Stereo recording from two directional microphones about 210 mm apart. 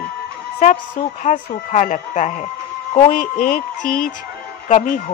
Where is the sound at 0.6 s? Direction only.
35° left (ahead or behind).